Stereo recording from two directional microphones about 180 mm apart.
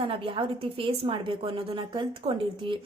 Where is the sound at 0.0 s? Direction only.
30° right (ahead or behind).